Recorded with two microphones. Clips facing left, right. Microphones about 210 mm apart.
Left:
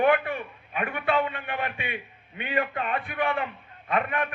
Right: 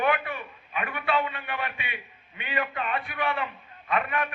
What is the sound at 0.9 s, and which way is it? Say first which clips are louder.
A man's voice: left 2 dB; 50° left (ahead or behind).